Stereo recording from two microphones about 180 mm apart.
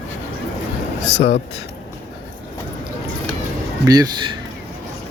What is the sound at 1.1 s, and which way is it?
Speech, 40° left (ahead or behind).